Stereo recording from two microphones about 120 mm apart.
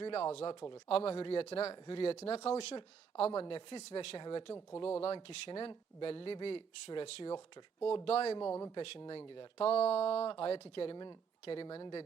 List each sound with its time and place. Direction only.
0.0 s speech: 55° left (ahead or behind)
4.2 s speech: 45° left (ahead or behind)
4.9 s speech: 55° left (ahead or behind)
7.9 s speech: 55° left (ahead or behind)
8.4 s speech: 20° left (ahead or behind)
8.7 s speech: 55° left (ahead or behind)
10.9 s speech: 40° left (ahead or behind)